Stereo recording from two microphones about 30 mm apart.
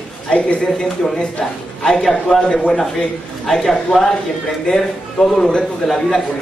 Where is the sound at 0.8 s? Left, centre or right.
Centre.